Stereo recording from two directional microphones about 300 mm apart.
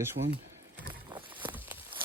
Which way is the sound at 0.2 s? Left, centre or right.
Right.